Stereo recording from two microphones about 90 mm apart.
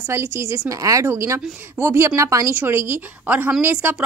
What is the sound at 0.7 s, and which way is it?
A woman's voice, 40° right (ahead or behind).